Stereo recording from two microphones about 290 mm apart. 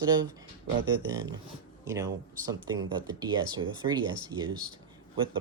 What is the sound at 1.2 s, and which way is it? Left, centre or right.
Speech, centre.